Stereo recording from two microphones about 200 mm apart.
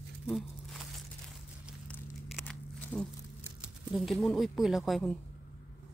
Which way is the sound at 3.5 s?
Centre (ahead or behind).